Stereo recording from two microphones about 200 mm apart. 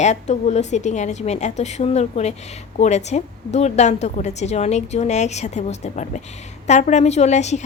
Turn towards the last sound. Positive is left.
turn(degrees=35)  # may be behind; listen again after turning